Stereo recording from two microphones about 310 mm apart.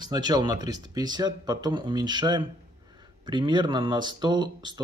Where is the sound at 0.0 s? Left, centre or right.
Centre.